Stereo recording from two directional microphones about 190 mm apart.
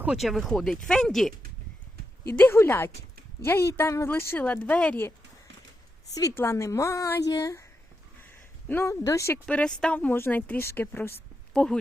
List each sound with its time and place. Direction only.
0.0 s speech: 5° right (ahead or behind)
2.4 s a woman's voice: 10° left (ahead or behind)
6.1 s a woman's voice: 15° left (ahead or behind)